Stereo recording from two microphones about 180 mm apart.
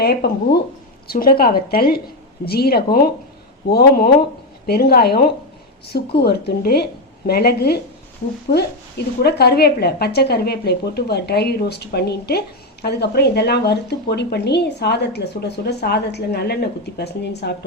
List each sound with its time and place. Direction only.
0.0 s a woman's voice: 60° left (ahead or behind)